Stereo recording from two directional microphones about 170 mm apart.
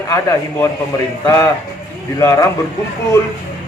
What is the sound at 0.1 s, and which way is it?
A man's voice, 15° left (ahead or behind).